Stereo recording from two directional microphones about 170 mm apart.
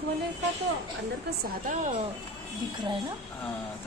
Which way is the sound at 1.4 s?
50° right (ahead or behind).